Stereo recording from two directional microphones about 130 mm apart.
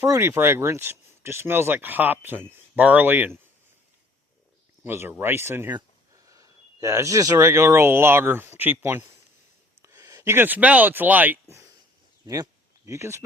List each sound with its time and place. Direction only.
0.0 s speech: 20° right (ahead or behind)
4.8 s speech: 15° right (ahead or behind)
12.2 s speech: 25° right (ahead or behind)